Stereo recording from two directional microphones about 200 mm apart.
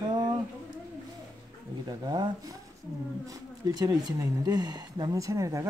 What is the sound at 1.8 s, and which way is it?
Speech, 20° right (ahead or behind).